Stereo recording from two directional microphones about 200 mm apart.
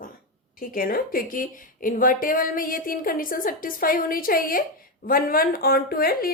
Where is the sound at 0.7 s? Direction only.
45° left (ahead or behind).